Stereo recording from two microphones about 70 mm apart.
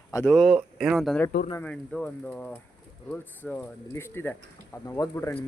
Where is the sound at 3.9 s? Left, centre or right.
Left.